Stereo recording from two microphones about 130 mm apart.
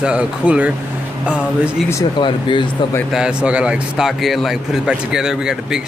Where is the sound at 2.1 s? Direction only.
40° left (ahead or behind).